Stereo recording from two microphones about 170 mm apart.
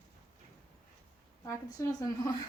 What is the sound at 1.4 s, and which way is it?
Speech, 20° left (ahead or behind).